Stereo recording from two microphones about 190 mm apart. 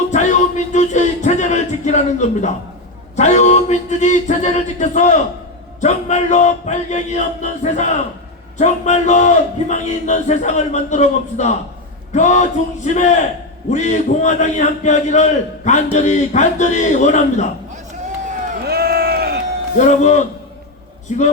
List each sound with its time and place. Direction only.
0.1 s music: 40° left (ahead or behind)
3.2 s a man's voice: 40° left (ahead or behind)
18.7 s crowd: 55° right (ahead or behind)
19.7 s a man's voice: 40° left (ahead or behind)